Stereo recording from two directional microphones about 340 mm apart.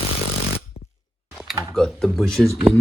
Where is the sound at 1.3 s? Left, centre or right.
Centre.